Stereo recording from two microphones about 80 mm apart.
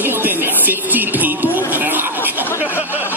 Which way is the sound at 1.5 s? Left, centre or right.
Right.